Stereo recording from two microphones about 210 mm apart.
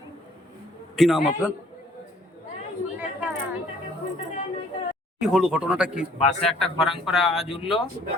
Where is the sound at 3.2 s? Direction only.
5° right (ahead or behind).